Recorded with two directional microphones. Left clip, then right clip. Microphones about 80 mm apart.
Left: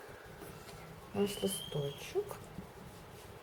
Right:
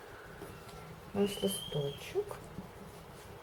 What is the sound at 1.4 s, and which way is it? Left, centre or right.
Speech, left.